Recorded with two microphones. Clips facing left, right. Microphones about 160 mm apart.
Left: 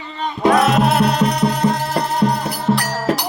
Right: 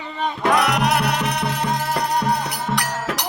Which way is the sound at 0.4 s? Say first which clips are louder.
Left 5 dB; 25° left (ahead or behind).